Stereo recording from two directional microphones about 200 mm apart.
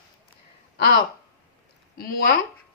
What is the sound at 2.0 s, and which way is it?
Speech, 45° left (ahead or behind).